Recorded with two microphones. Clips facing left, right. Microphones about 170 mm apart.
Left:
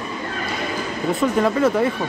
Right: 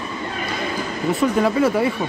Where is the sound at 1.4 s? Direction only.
5° right (ahead or behind).